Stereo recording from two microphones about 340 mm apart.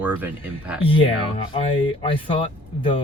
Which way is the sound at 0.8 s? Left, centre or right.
Centre.